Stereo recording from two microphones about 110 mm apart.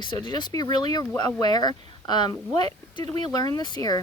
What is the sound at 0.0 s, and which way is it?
Speech, 40° left (ahead or behind).